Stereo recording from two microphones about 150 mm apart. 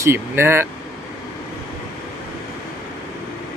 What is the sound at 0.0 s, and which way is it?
Speech, 15° right (ahead or behind).